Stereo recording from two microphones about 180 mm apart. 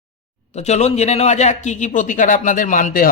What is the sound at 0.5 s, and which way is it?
A man's voice, 40° left (ahead or behind).